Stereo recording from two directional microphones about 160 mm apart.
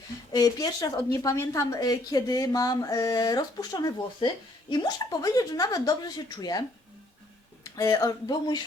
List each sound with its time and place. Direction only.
0.3 s speech: 25° left (ahead or behind)